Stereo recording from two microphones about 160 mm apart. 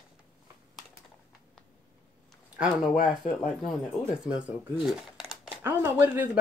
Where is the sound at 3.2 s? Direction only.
50° left (ahead or behind).